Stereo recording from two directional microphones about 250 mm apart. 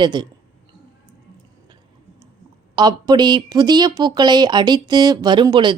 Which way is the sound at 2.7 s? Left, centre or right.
Centre.